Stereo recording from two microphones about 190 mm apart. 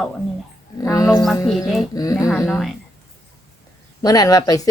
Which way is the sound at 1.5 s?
Centre (ahead or behind).